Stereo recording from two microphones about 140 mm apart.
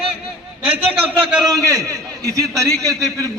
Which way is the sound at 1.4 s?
25° right (ahead or behind).